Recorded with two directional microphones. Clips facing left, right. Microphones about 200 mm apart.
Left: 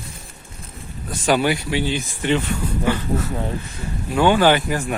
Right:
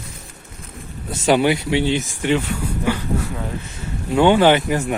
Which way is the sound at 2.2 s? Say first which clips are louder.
Right 1 dB; 10° right (ahead or behind).